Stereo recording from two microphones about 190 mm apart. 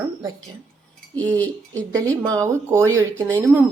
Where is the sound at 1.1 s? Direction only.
5° left (ahead or behind).